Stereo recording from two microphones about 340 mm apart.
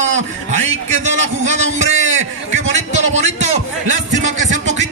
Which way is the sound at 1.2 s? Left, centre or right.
Right.